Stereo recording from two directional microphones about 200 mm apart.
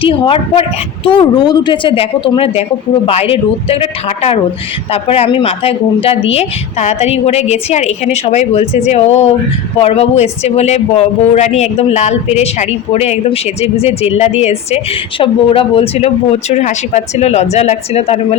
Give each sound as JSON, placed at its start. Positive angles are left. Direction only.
{"t": 0.0, "sound": "a man's voice", "side_deg": 25}